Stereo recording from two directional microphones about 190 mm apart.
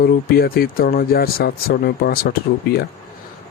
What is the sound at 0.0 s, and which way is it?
Speech, 50° left (ahead or behind).